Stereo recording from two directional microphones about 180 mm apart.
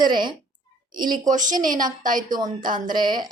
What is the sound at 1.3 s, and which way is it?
A woman's voice, 45° right (ahead or behind).